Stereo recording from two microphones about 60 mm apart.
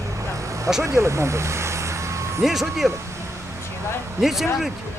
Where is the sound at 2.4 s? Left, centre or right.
Centre.